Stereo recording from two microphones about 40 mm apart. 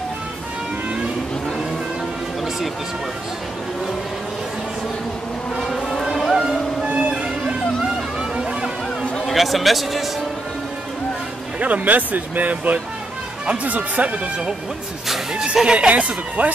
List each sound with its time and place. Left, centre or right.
6.3 s music: centre
6.8 s music: right
9.2 s a man's voice: centre
11.6 s speech: right
15.3 s speech: centre
16.0 s speech: right